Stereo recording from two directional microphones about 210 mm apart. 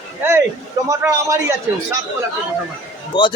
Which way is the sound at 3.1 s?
20° left (ahead or behind).